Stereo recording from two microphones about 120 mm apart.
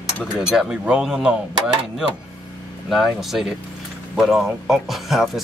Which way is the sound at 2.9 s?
Centre (ahead or behind).